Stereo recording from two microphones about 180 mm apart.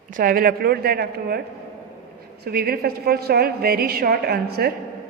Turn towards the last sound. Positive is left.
turn(degrees=-60)  # may be behind; listen again after turning